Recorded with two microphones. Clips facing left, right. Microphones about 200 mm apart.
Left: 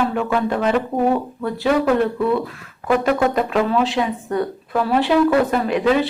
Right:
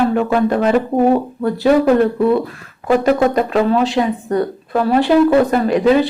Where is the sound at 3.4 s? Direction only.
40° right (ahead or behind).